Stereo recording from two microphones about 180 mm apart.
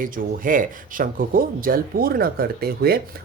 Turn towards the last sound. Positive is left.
turn(degrees=-60)  # may be behind; listen again after turning